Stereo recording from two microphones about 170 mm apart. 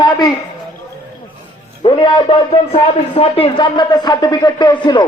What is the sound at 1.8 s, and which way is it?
A man's voice, 25° left (ahead or behind).